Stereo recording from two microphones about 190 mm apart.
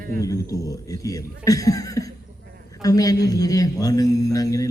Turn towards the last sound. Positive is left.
turn(degrees=15)  # may be behind; listen again after turning